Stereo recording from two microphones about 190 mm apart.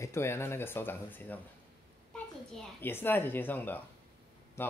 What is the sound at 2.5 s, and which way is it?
Speech, 10° left (ahead or behind).